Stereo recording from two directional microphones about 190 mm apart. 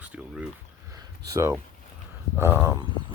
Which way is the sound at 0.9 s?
15° right (ahead or behind).